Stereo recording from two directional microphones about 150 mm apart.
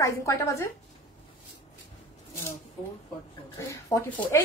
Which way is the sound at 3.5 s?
20° left (ahead or behind).